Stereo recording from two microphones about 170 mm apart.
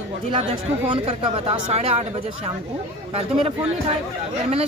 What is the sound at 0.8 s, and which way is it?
Speech, 30° right (ahead or behind).